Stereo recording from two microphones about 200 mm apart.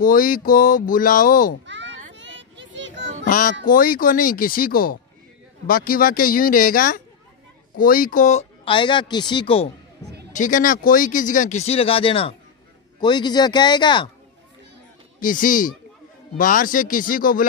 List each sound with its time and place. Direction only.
0.0 s speech: 45° left (ahead or behind)
1.7 s children playing: 65° right (ahead or behind)
3.3 s speech: 40° left (ahead or behind); by 9.7 s 25° left (ahead or behind)
10.3 s speech: 40° left (ahead or behind); by 14.0 s 20° left (ahead or behind)
15.1 s speech: 40° left (ahead or behind)